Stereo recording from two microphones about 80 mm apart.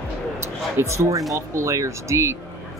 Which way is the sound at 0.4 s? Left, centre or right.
Right.